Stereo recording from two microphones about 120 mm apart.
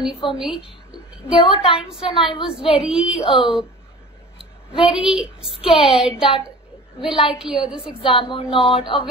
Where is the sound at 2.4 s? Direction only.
5° right (ahead or behind).